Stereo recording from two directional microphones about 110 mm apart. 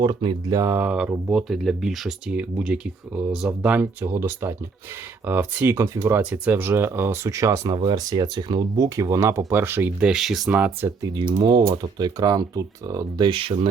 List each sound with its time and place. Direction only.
0.0 s speech: 45° right (ahead or behind); by 3.8 s 10° right (ahead or behind)
4.0 s speech: 25° right (ahead or behind)
7.8 s speech: 40° right (ahead or behind)
8.8 s speech: 30° right (ahead or behind)
9.5 s speech: 20° right (ahead or behind)
10.0 s speech: 5° right (ahead or behind)
10.5 s speech: 15° right (ahead or behind)
11.2 s speech: 40° right (ahead or behind)
13.2 s speech: 50° right (ahead or behind)